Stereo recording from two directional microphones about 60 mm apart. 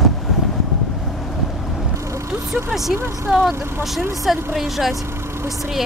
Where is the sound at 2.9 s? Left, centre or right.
Right.